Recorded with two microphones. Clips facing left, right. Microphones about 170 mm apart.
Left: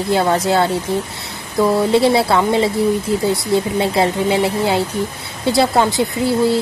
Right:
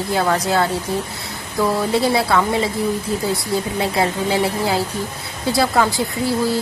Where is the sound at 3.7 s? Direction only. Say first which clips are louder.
Left 3 dB; 25° left (ahead or behind).